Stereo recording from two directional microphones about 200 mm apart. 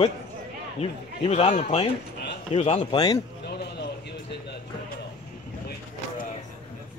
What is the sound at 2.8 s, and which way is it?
Speech, 20° left (ahead or behind).